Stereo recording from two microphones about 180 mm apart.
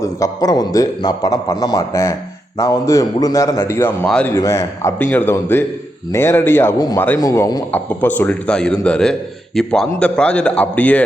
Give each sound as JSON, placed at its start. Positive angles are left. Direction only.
{"t": 0.0, "sound": "a man's voice", "side_deg": 20}